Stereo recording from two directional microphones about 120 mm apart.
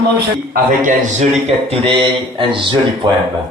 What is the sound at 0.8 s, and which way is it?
A man's voice, 90° right.